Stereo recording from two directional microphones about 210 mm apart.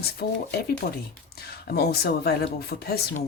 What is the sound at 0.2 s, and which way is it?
Speech, 50° left (ahead or behind).